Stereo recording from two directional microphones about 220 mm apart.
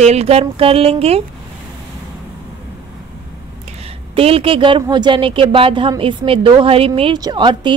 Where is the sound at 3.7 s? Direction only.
25° right (ahead or behind).